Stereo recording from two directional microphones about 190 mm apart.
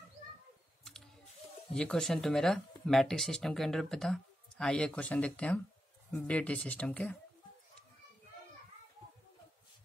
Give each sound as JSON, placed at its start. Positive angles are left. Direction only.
{"t": 1.7, "sound": "speech", "side_deg": 5}